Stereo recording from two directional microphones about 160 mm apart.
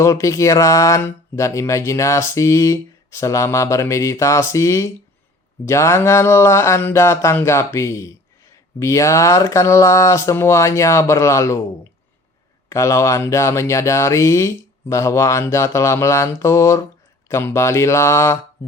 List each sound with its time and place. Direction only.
0.0 s speech: 20° left (ahead or behind)
12.6 s speech: 20° left (ahead or behind)